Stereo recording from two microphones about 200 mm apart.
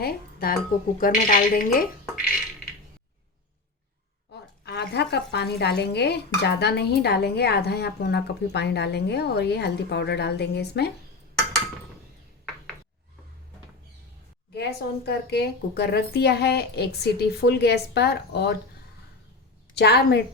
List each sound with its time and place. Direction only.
0.0 s speech: 50° left (ahead or behind)
4.6 s stir: 55° left (ahead or behind)
14.5 s stir: 55° left (ahead or behind)
19.7 s stir: 55° left (ahead or behind)